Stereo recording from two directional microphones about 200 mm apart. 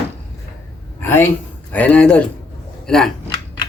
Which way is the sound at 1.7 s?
5° left (ahead or behind).